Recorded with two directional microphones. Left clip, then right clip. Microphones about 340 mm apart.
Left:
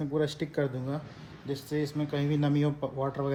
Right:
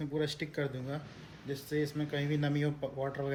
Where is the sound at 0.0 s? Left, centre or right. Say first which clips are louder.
Left 5 dB; centre.